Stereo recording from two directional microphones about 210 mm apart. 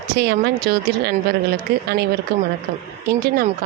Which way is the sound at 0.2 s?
50° right (ahead or behind).